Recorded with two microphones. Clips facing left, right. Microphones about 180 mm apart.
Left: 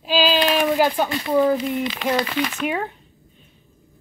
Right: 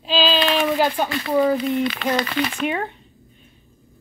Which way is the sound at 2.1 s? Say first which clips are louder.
Even; 5° left (ahead or behind).